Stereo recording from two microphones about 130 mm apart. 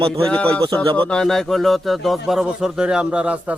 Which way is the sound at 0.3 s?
10° left (ahead or behind).